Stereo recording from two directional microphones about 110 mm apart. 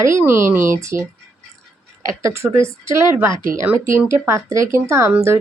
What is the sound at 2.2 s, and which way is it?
Speech, 25° right (ahead or behind).